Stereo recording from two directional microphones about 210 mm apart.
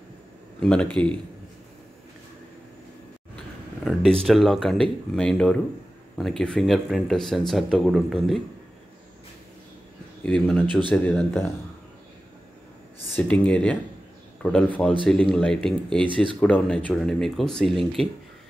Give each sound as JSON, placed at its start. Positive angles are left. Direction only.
{"t": 0.6, "sound": "speech", "side_deg": 5}
{"t": 3.8, "sound": "speech", "side_deg": 0}
{"t": 10.2, "sound": "speech", "side_deg": 5}
{"t": 13.1, "sound": "speech", "side_deg": 5}